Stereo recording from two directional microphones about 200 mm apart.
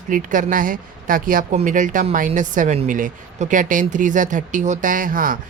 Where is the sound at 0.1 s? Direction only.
40° right (ahead or behind).